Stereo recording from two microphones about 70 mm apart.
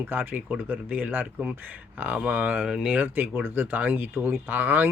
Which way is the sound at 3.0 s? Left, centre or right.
Right.